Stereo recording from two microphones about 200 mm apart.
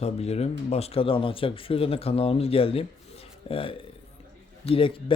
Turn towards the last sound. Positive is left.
turn(degrees=25)  # may be behind; listen again after turning